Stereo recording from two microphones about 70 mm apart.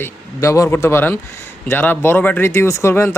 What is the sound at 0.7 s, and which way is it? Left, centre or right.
Speech, left.